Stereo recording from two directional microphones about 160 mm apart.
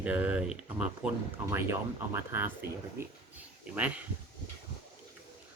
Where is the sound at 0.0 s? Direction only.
10° right (ahead or behind).